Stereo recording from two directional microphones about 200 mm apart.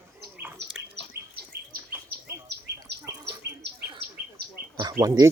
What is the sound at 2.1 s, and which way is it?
Insect, 50° right (ahead or behind).